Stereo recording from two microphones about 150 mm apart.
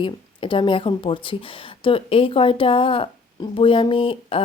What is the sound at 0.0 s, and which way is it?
Speech, 35° left (ahead or behind).